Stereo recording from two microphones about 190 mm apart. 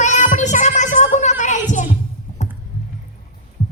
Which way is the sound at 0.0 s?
40° left (ahead or behind).